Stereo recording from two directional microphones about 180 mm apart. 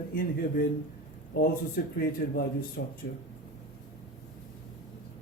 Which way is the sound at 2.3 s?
55° left (ahead or behind).